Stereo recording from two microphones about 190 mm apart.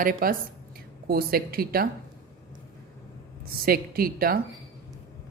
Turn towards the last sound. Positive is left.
turn(degrees=-50)  # may be behind; listen again after turning